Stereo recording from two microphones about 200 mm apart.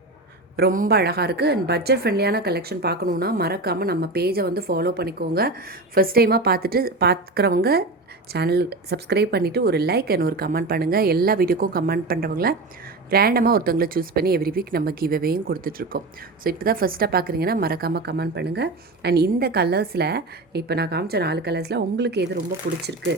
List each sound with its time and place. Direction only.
0.5 s a woman's voice: 45° right (ahead or behind)